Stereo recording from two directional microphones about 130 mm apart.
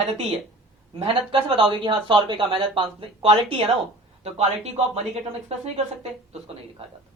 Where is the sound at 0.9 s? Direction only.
45° right (ahead or behind).